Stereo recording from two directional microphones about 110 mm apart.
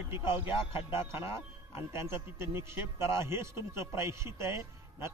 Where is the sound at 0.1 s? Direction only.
20° right (ahead or behind).